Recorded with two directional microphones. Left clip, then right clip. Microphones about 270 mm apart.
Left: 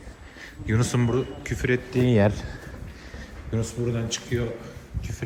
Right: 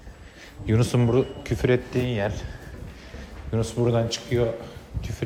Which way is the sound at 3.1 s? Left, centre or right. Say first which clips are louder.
Right 3 dB; centre.